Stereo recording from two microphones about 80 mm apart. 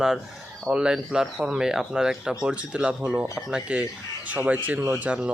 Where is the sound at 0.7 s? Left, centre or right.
Centre.